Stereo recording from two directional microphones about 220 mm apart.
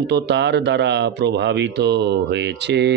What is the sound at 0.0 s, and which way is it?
Speech, 50° right (ahead or behind).